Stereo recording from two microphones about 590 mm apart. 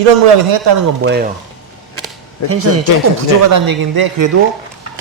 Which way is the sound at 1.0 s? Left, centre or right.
Centre.